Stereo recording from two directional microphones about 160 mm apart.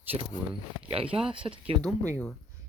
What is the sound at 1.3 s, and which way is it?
Speech, 30° right (ahead or behind).